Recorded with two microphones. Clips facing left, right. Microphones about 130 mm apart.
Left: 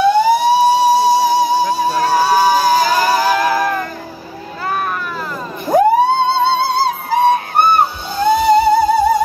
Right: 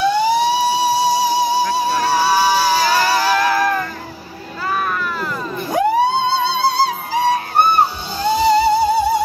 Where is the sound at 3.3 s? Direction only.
15° left (ahead or behind).